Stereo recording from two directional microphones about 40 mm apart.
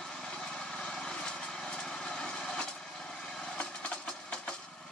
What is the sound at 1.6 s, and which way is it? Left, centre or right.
Vehicle, centre.